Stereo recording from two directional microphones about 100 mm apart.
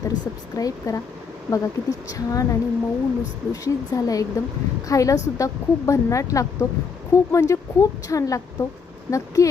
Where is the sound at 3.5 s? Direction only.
35° left (ahead or behind).